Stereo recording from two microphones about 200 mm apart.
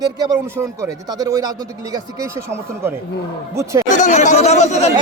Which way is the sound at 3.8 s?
40° left (ahead or behind).